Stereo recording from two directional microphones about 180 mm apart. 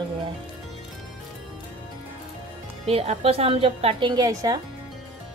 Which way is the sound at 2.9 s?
35° right (ahead or behind).